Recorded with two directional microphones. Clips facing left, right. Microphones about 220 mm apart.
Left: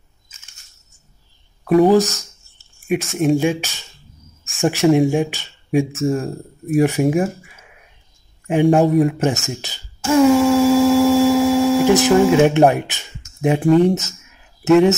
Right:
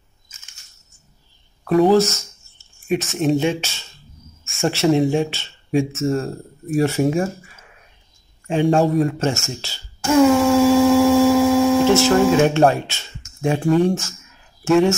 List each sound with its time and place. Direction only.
1.6 s speech: 15° left (ahead or behind)
10.4 s a sound: centre (ahead or behind)
11.9 s speech: 15° left (ahead or behind)